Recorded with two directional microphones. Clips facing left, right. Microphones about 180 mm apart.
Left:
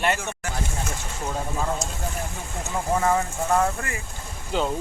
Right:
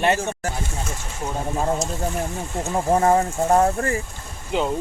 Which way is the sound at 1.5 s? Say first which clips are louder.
Right 5 dB; 35° right (ahead or behind).